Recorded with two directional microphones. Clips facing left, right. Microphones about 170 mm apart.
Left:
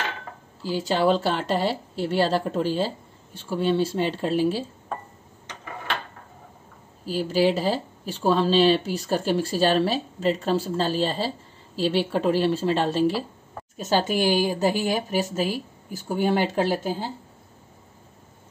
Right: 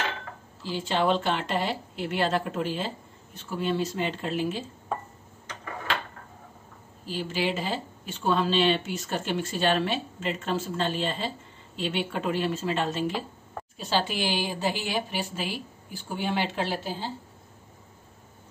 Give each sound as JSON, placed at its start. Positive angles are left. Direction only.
{"t": 0.7, "sound": "speech", "side_deg": 40}
{"t": 7.1, "sound": "speech", "side_deg": 40}
{"t": 13.7, "sound": "speech", "side_deg": 45}